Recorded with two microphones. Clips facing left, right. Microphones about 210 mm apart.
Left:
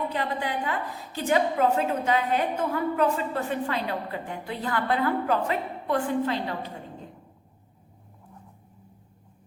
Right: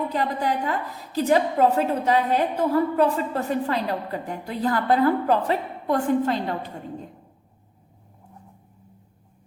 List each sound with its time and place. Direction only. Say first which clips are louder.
0.1 s a woman's voice: right 4 dB; 40° right (ahead or behind)